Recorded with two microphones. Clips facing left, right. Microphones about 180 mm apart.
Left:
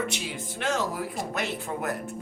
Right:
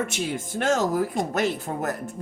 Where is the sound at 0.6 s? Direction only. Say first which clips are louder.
Right 6 dB; 45° right (ahead or behind).